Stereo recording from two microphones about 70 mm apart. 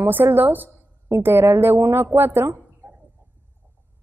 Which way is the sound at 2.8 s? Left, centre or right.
Right.